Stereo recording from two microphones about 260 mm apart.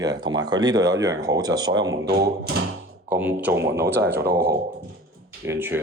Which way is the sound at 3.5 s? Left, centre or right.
Right.